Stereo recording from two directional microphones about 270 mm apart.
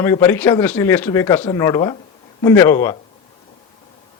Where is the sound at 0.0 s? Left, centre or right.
Centre.